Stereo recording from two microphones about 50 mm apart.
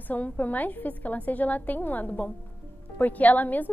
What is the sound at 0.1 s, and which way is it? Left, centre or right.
A woman's voice, left.